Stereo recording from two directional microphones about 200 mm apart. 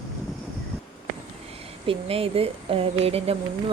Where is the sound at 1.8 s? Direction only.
25° right (ahead or behind).